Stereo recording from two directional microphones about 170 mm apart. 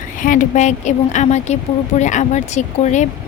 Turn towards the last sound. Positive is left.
turn(degrees=45)  # may be behind; listen again after turning